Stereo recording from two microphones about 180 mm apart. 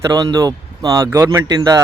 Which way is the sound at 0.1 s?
20° right (ahead or behind).